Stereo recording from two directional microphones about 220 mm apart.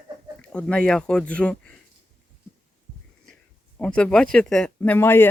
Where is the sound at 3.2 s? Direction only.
5° left (ahead or behind).